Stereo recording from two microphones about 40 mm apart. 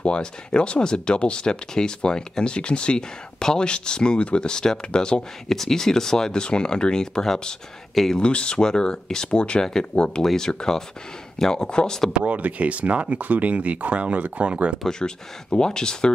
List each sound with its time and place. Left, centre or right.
0.0 s speech: left
5.5 s speech: centre
7.9 s speech: centre
8.2 s speech: left
10.2 s speech: centre
12.3 s speech: right
14.9 s speech: centre